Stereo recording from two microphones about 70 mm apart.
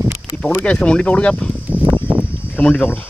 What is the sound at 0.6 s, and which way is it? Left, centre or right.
Speech, centre.